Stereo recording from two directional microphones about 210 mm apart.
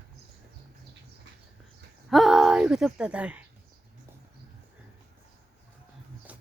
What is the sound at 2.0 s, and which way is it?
Speech, centre (ahead or behind).